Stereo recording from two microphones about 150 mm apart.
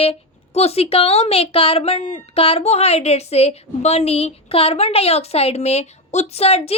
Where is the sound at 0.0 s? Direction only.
40° left (ahead or behind).